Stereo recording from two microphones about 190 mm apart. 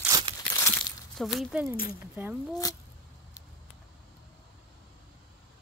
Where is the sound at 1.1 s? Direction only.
Centre (ahead or behind).